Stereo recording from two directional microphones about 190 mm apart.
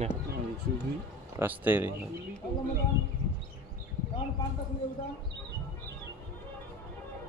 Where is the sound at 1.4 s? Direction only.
10° right (ahead or behind).